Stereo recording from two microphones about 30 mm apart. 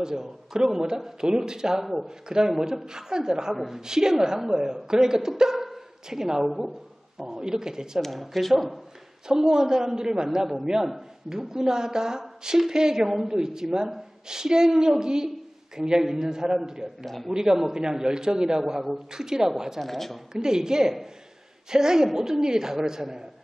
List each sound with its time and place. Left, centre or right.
0.0 s speech: centre
6.4 s a woman's voice: centre
7.3 s speech: right
8.0 s speech: centre
9.3 s a woman's voice: centre
17.0 s speech: centre
17.3 s speech: right
18.7 s a woman's voice: centre
19.1 s speech: centre
19.8 s speech: centre
20.3 s speech: right